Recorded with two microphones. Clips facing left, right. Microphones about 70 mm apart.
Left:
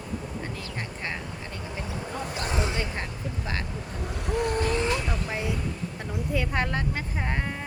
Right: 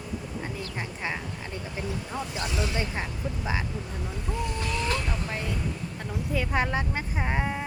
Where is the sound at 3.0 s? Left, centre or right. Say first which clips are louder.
Right 1 dB; centre.